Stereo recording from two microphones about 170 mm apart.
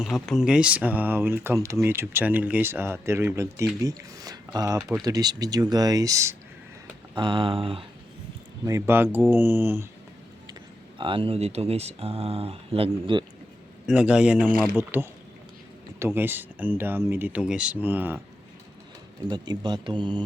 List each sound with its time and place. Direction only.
0.0 s speech: centre (ahead or behind); by 6.3 s 20° right (ahead or behind)
7.2 s speech: 30° right (ahead or behind)
8.6 s speech: 15° right (ahead or behind)
10.9 s speech: 30° right (ahead or behind)
13.8 s speech: 5° right (ahead or behind)
19.3 s speech: 25° right (ahead or behind)